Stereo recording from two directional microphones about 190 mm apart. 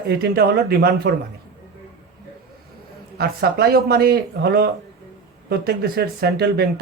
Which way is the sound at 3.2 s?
55° right (ahead or behind).